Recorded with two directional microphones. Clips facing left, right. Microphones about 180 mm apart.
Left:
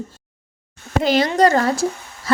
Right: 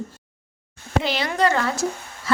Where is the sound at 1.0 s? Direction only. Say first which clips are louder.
Left 7 dB; 45° left (ahead or behind).